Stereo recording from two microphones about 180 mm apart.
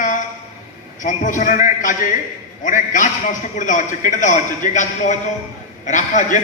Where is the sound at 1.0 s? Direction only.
45° left (ahead or behind).